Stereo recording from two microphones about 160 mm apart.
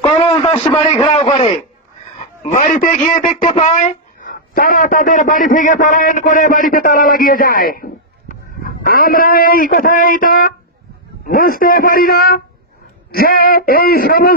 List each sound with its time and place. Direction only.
0.2 s radio: 25° left (ahead or behind)
1.0 s a man's voice: 40° left (ahead or behind)
2.1 s a man's voice: 50° left (ahead or behind); by 14.3 s 70° left (ahead or behind)